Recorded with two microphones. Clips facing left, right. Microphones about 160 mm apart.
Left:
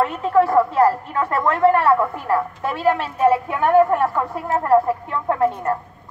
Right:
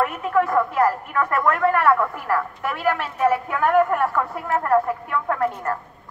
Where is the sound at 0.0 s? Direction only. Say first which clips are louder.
Left 4 dB; 30° left (ahead or behind).